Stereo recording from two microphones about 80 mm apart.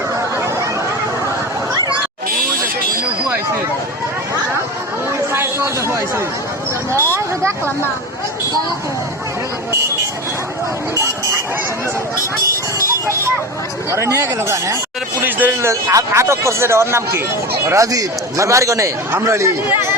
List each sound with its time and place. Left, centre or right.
0.3 s a sound: right
5.3 s a sound: right
6.9 s speech: right
10.9 s speech: right
13.9 s speech: right
15.2 s speech: right
15.7 s speech: right